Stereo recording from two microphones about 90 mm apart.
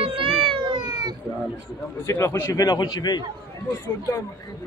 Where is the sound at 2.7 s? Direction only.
50° left (ahead or behind).